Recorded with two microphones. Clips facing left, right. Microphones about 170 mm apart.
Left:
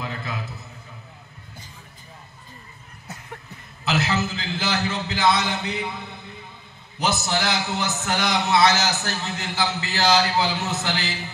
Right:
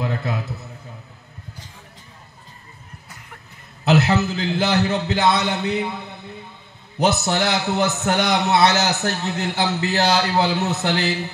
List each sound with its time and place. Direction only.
3.8 s a man's voice: 65° right (ahead or behind)
4.7 s speech: 35° right (ahead or behind)
5.1 s a man's voice: 65° right (ahead or behind)
7.0 s a man's voice: 60° right (ahead or behind)